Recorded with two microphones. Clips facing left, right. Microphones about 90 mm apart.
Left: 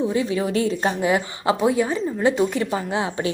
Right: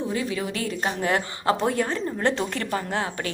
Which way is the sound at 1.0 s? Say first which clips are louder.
Left 1 dB; 10° left (ahead or behind).